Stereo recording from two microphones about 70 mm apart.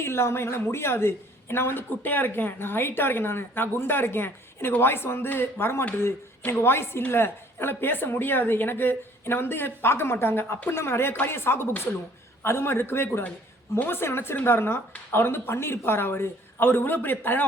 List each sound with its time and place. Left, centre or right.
0.0 s a woman's voice: left